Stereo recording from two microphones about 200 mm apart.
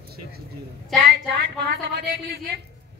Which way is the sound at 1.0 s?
50° right (ahead or behind).